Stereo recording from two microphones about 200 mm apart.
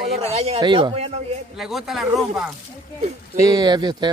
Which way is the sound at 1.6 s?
Centre (ahead or behind).